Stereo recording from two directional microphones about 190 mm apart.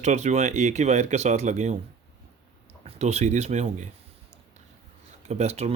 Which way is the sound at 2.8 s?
35° right (ahead or behind).